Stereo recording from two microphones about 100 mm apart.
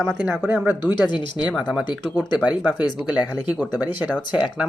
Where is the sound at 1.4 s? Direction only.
5° right (ahead or behind).